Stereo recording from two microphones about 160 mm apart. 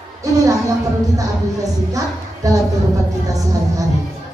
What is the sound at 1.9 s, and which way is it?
Speech, 20° right (ahead or behind).